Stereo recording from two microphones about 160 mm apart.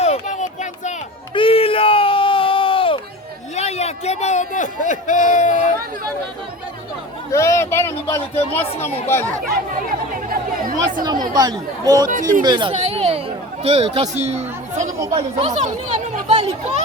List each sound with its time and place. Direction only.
0.0 s a sound: 45° left (ahead or behind)
1.3 s a sound: 35° left (ahead or behind); by 5.7 s 50° left (ahead or behind)
7.3 s speech: 20° left (ahead or behind)
10.2 s chatter: 60° right (ahead or behind)
11.0 s speech: 25° right (ahead or behind)
12.1 s speech: 55° right (ahead or behind)
12.5 s speech: 30° right (ahead or behind)
12.7 s a sound: 40° right (ahead or behind)
15.1 s chatter: 40° right (ahead or behind)